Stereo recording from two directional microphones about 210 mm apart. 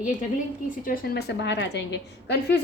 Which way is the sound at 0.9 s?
50° left (ahead or behind).